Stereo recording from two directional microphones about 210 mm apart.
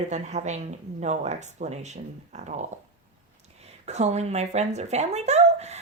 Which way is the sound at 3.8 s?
30° right (ahead or behind).